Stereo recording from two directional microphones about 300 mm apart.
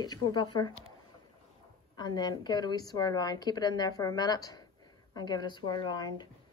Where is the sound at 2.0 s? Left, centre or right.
Centre.